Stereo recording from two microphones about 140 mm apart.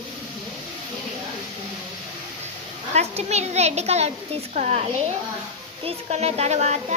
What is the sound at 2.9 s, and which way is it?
A child's voice, 50° right (ahead or behind).